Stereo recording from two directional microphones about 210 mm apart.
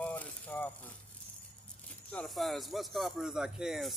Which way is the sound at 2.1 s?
Centre (ahead or behind).